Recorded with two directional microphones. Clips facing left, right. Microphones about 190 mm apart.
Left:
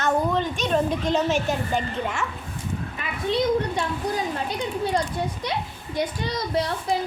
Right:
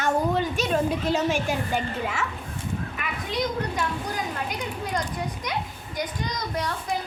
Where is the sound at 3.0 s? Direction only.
30° left (ahead or behind).